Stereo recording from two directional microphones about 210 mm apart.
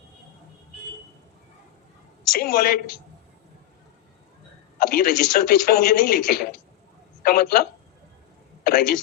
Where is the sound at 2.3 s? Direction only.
45° left (ahead or behind).